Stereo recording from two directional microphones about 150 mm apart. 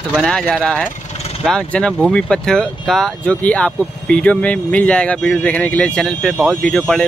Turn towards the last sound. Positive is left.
turn(degrees=5)  # may be behind; listen again after turning